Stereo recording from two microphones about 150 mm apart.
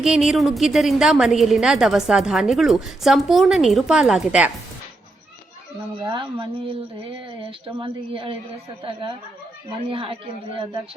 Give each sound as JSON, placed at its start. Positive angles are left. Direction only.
{"t": 0.0, "sound": "a woman's voice", "side_deg": -5}
{"t": 6.0, "sound": "a woman's voice", "side_deg": -30}